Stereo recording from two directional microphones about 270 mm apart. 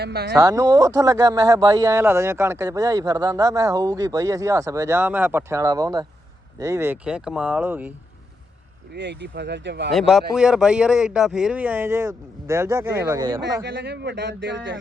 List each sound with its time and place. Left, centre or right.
0.0 s speech: right
0.3 s speech: centre
8.9 s speech: right
10.1 s speech: centre
13.7 s speech: right